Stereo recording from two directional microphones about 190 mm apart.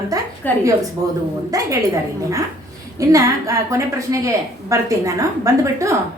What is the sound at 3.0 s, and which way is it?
A woman's voice, 15° right (ahead or behind).